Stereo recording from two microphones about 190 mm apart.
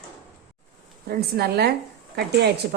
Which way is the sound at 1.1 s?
55° right (ahead or behind).